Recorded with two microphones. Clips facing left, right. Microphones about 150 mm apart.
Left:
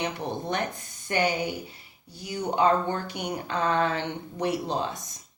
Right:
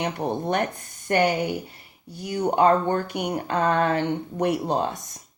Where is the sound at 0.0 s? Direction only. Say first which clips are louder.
Right 4 dB; 55° right (ahead or behind).